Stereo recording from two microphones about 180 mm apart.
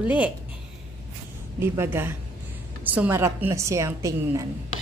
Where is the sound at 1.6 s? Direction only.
15° right (ahead or behind).